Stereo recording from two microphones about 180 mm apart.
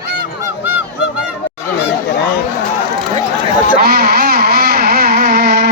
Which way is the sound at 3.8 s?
60° right (ahead or behind).